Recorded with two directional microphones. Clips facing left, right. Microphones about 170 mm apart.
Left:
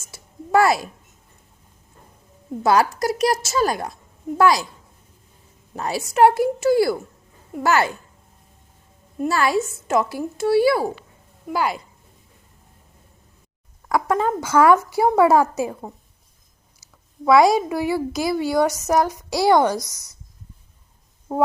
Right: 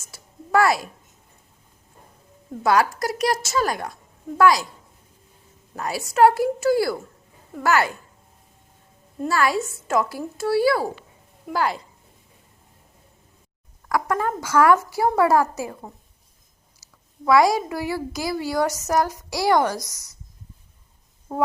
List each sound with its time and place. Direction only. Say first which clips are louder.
0.1 s a sound: left 2 dB; 25° left (ahead or behind)
2.6 s a child's voice: left 2 dB; 25° left (ahead or behind)
5.7 s a child's voice: left 2 dB; 25° left (ahead or behind)
9.2 s a child's voice: left 2 dB; 25° left (ahead or behind)
11.4 s speech: left 1 dB; 10° left (ahead or behind)
13.8 s a child's voice: left 3 dB; 20° left (ahead or behind)
17.2 s a child's voice: left 3 dB; 25° left (ahead or behind)